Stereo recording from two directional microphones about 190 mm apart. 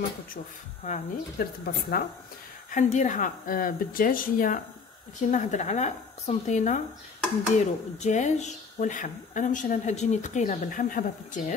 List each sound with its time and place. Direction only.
0.8 s a woman's voice: 40° left (ahead or behind)
1.6 s speech: 50° left (ahead or behind)
2.7 s a woman's voice: 40° left (ahead or behind)
8.0 s a woman's voice: 40° left (ahead or behind)